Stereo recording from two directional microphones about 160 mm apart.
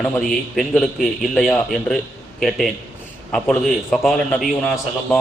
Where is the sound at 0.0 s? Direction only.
5° left (ahead or behind).